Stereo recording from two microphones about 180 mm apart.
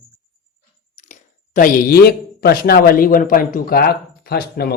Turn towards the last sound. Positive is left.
turn(degrees=60)  # may be behind; listen again after turning